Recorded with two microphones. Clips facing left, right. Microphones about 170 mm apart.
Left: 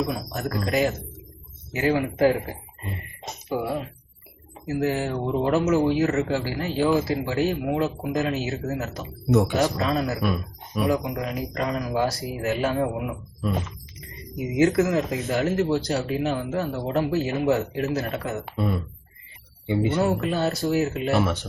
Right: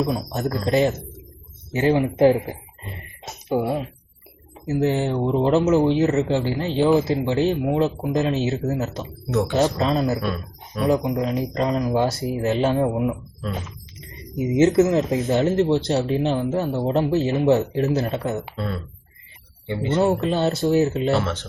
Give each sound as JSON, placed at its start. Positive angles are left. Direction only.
{"t": 0.0, "sound": "speech", "side_deg": -30}
{"t": 3.5, "sound": "speech", "side_deg": -25}
{"t": 9.3, "sound": "speech", "side_deg": 15}
{"t": 9.6, "sound": "speech", "side_deg": -25}
{"t": 10.2, "sound": "speech", "side_deg": 10}
{"t": 10.8, "sound": "speech", "side_deg": -25}
{"t": 14.3, "sound": "speech", "side_deg": -25}
{"t": 18.5, "sound": "speech", "side_deg": 15}
{"t": 20.0, "sound": "speech", "side_deg": -25}
{"t": 21.1, "sound": "speech", "side_deg": 10}